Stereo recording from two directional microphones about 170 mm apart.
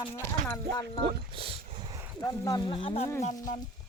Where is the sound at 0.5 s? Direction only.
20° left (ahead or behind).